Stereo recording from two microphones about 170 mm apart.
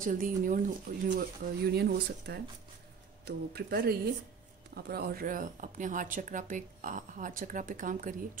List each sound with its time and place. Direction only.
0.0 s speech: 50° right (ahead or behind)
1.7 s speech: 70° right (ahead or behind); by 8.3 s 50° right (ahead or behind)